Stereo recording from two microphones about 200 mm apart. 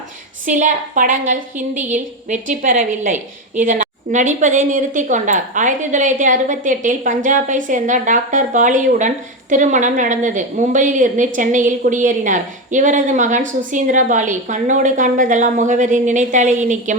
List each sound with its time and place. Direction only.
0.4 s a woman's voice: 40° right (ahead or behind)